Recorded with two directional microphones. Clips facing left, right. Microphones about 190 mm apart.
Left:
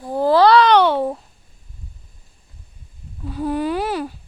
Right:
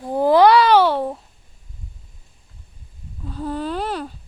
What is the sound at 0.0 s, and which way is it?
Babbling, 15° right (ahead or behind).